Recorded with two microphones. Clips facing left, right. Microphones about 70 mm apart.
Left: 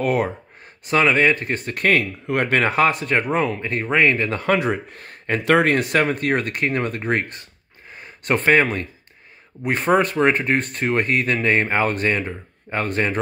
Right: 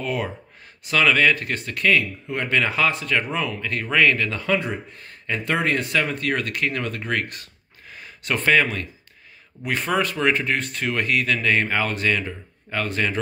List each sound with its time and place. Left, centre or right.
0.0 s speech: left
0.9 s speech: left
4.3 s speech: left
5.4 s speech: left
5.7 s speech: left
7.9 s a sound: left
8.4 s speech: left